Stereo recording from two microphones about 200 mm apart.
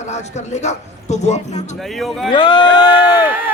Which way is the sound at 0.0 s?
35° left (ahead or behind).